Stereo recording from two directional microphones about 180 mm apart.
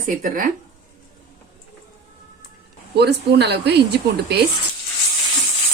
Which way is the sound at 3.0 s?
65° right (ahead or behind).